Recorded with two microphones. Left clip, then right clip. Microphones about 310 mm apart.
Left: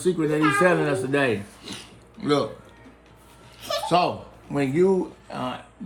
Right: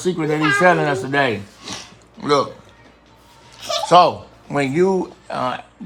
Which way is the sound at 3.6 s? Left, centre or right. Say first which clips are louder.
Right 9 dB; right.